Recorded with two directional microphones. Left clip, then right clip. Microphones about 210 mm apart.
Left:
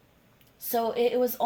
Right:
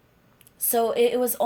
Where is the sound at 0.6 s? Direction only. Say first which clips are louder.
Right 5 dB; 45° right (ahead or behind).